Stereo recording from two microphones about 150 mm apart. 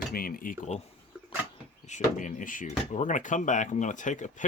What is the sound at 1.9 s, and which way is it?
Speech, 60° left (ahead or behind).